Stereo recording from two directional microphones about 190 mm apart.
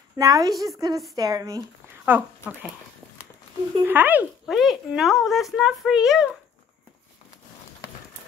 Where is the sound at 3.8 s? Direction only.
10° right (ahead or behind).